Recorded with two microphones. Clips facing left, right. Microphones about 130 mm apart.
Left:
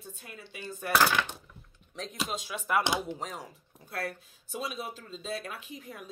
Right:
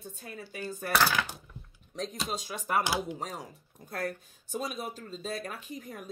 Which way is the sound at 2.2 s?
40° right (ahead or behind).